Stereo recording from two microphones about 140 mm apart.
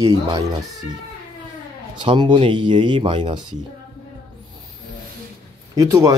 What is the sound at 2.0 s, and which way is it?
Speech, 35° right (ahead or behind).